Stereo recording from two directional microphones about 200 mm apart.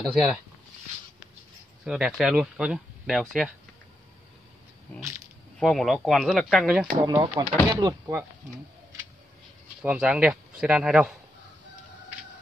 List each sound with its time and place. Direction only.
0.0 s speech: centre (ahead or behind)
1.9 s speech: 5° right (ahead or behind)
5.6 s speech: centre (ahead or behind)
7.0 s speech: 20° right (ahead or behind)
9.8 s speech: 5° right (ahead or behind)